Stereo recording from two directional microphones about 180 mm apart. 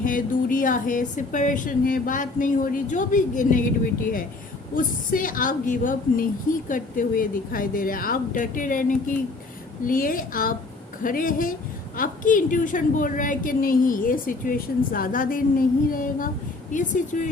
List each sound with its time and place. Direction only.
0.0 s a woman's voice: 50° left (ahead or behind)
4.7 s a woman's voice: 50° left (ahead or behind)